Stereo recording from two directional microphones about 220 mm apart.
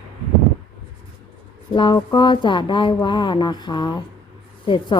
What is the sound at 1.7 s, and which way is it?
Speech, 20° left (ahead or behind).